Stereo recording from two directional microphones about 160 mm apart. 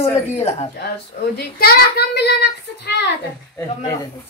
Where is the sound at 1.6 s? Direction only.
75° left (ahead or behind).